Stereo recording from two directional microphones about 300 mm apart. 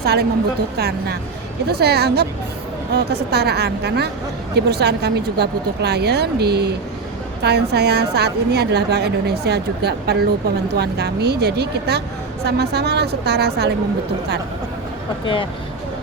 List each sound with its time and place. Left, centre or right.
0.0 s a woman's voice: right